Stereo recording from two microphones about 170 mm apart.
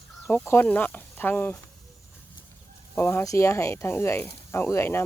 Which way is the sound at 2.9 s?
15° left (ahead or behind).